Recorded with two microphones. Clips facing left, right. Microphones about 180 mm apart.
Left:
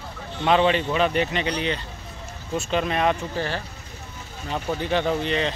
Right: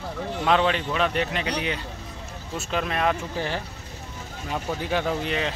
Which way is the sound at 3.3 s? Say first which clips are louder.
Left 1 dB; 15° right (ahead or behind).